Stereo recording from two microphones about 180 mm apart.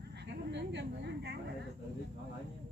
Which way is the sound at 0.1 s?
70° right (ahead or behind).